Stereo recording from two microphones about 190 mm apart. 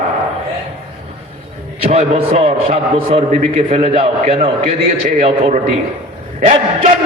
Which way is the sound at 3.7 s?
30° right (ahead or behind).